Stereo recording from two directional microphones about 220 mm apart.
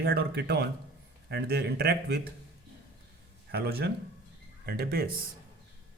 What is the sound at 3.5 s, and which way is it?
Speech, 45° right (ahead or behind).